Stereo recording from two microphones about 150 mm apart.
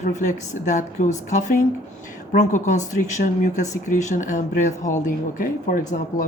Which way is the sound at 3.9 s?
55° left (ahead or behind).